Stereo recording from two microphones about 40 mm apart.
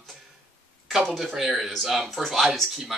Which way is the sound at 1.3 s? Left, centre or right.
Centre.